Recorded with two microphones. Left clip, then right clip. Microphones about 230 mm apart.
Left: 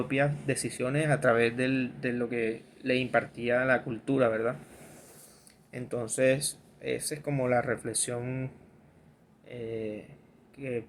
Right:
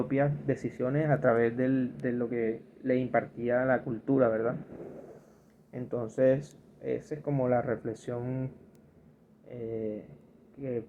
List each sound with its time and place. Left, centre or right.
0.0 s speech: left
5.7 s speech: left
9.5 s speech: left